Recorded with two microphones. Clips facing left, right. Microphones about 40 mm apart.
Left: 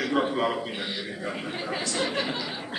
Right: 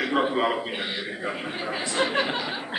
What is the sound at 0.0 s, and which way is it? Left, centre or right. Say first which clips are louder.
A man's voice: right 2 dB; centre.